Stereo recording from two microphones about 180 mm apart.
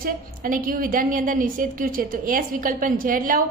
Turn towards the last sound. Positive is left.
turn(degrees=-50)  # may be behind; listen again after turning